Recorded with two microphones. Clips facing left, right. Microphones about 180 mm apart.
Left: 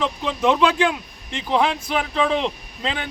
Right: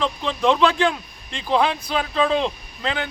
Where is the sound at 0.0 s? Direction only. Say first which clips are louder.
Even; 15° left (ahead or behind).